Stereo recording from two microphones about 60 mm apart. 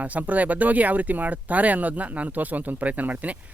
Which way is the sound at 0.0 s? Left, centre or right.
Right.